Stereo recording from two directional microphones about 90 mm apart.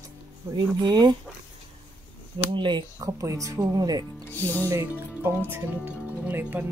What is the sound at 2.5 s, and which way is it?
Speech, 65° right (ahead or behind).